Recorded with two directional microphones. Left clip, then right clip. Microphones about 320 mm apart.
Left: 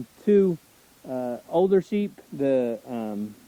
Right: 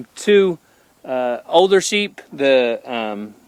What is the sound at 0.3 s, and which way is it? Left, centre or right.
Speech, centre.